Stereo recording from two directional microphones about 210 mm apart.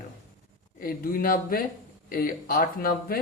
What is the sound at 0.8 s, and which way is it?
Speech, 40° left (ahead or behind).